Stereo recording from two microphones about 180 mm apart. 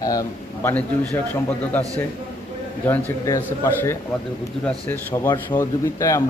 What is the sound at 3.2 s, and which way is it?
Speech, 15° left (ahead or behind).